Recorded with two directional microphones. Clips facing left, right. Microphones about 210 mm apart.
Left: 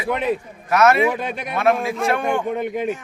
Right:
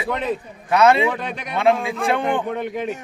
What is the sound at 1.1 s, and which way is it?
Speech, 10° left (ahead or behind).